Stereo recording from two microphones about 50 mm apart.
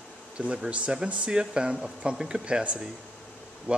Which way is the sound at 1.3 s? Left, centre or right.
Centre.